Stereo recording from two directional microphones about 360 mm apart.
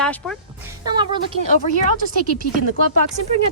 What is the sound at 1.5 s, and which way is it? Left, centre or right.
Speech, centre.